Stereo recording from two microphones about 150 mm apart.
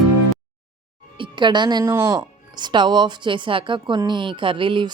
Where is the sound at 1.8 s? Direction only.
15° right (ahead or behind).